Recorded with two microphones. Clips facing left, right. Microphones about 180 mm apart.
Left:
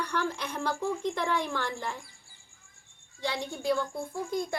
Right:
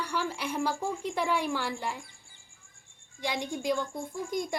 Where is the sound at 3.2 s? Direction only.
15° right (ahead or behind).